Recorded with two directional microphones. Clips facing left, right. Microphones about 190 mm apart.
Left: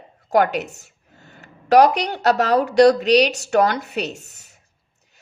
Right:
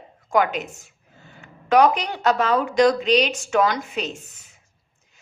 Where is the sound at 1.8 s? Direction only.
70° left (ahead or behind).